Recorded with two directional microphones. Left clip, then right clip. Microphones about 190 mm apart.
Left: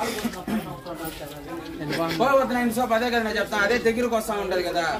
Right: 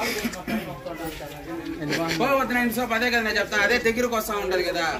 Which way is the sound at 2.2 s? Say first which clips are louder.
Left 3 dB; 35° left (ahead or behind).